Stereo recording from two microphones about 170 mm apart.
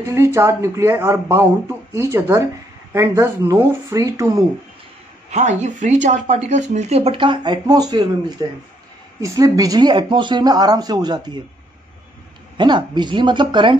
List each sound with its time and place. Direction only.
0.0 s speech: 15° right (ahead or behind)
5.3 s speech: 45° right (ahead or behind); by 11.3 s 25° right (ahead or behind)
12.5 s speech: 25° right (ahead or behind)